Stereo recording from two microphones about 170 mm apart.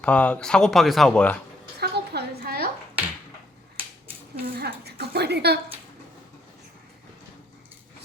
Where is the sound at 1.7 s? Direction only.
70° right (ahead or behind).